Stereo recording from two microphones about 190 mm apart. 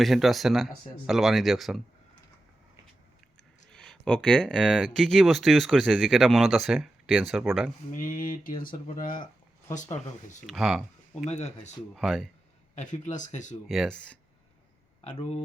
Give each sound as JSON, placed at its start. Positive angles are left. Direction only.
{"t": 0.0, "sound": "speech", "side_deg": 0}
{"t": 3.7, "sound": "speech", "side_deg": 5}
{"t": 7.9, "sound": "speech", "side_deg": 45}
{"t": 10.4, "sound": "speech", "side_deg": 0}
{"t": 11.3, "sound": "speech", "side_deg": 35}
{"t": 11.9, "sound": "speech", "side_deg": 0}
{"t": 12.7, "sound": "speech", "side_deg": 40}
{"t": 13.7, "sound": "speech", "side_deg": 0}
{"t": 15.0, "sound": "speech", "side_deg": 35}